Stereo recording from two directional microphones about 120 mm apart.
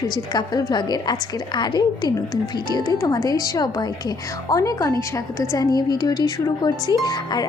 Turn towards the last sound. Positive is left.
turn(degrees=35)  # may be behind; listen again after turning